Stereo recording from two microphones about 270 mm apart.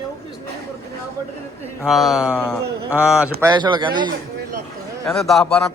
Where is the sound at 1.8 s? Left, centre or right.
Centre.